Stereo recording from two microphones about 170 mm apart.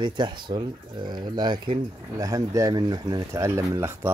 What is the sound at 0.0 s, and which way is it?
Speech, 25° right (ahead or behind).